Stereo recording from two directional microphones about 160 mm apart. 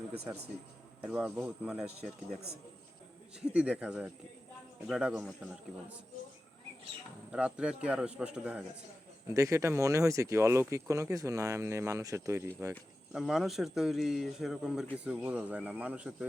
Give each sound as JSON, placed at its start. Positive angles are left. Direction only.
{"t": 1.0, "sound": "a man's voice", "side_deg": -5}
{"t": 3.4, "sound": "a man's voice", "side_deg": -10}
{"t": 7.3, "sound": "a man's voice", "side_deg": -5}
{"t": 9.2, "sound": "speech", "side_deg": -20}
{"t": 13.1, "sound": "a man's voice", "side_deg": 0}